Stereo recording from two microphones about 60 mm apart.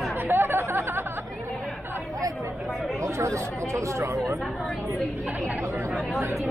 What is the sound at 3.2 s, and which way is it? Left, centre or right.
Speech, right.